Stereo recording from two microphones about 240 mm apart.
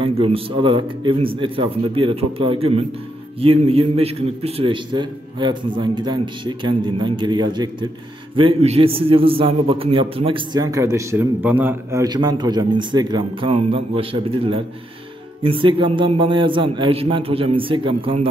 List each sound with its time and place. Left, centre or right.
0.0 s a man's voice: right